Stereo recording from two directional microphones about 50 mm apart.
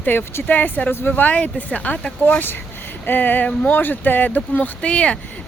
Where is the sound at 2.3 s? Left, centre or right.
Left.